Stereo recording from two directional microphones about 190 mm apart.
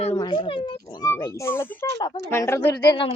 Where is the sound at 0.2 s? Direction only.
25° left (ahead or behind).